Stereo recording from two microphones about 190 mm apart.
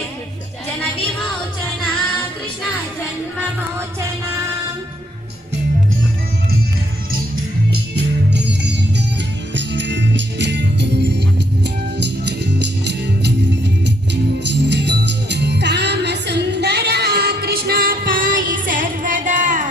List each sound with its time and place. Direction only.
7.7 s music: 60° right (ahead or behind)
9.6 s music: 70° right (ahead or behind); by 19.6 s 40° right (ahead or behind)